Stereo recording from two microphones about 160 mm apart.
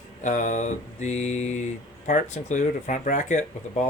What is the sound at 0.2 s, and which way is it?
Speech, 50° left (ahead or behind).